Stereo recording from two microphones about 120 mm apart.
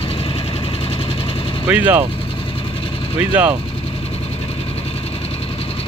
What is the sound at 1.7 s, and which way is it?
Speech, 15° right (ahead or behind).